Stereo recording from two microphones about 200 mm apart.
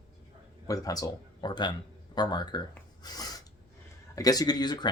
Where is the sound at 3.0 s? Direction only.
20° left (ahead or behind).